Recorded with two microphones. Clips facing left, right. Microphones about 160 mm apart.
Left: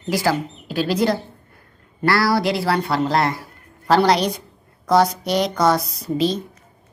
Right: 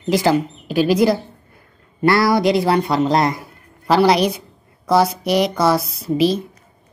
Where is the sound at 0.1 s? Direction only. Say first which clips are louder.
Right 4 dB; 20° right (ahead or behind).